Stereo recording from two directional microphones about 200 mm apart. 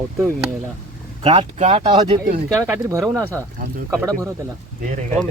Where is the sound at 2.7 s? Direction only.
10° right (ahead or behind).